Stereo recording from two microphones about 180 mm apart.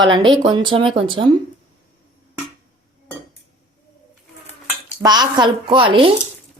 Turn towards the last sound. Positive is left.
turn(degrees=-30)  # may be behind; listen again after turning